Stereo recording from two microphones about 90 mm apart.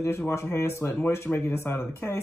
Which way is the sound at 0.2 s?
25° left (ahead or behind).